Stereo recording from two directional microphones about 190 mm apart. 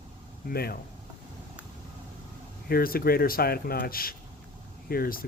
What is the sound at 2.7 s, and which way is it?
Speech, 50° left (ahead or behind).